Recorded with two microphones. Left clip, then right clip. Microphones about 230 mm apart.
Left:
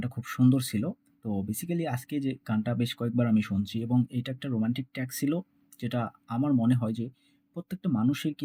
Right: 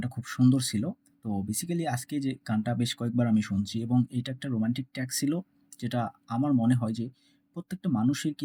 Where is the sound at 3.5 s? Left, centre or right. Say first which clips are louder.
Even; right.